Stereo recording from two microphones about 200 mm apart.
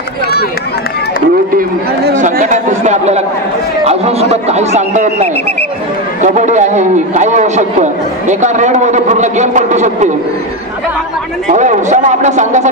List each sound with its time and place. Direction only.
2.1 s a man's voice: 40° right (ahead or behind)
11.5 s a man's voice: 35° right (ahead or behind)